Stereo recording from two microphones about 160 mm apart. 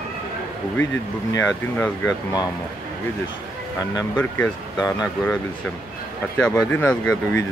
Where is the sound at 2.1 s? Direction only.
25° left (ahead or behind).